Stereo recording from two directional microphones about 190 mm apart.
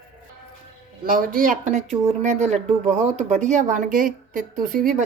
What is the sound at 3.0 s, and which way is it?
Speech, 35° right (ahead or behind).